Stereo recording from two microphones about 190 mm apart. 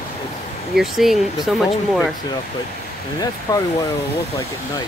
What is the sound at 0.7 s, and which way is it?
Speech, centre (ahead or behind).